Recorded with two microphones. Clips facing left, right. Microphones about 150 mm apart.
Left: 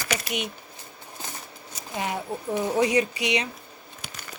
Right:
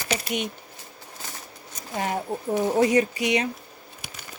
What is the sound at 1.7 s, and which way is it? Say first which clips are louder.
Speech: right 2 dB; 45° right (ahead or behind).